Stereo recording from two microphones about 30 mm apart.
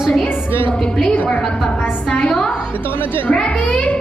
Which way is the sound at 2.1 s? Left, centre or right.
Left.